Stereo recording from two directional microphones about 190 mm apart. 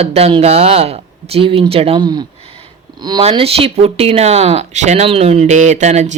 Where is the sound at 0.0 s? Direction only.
35° right (ahead or behind).